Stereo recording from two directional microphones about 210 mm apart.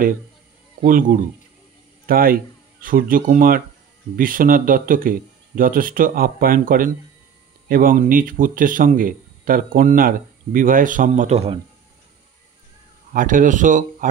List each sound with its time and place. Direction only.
0.7 s speech: 40° right (ahead or behind)
13.1 s speech: 40° right (ahead or behind)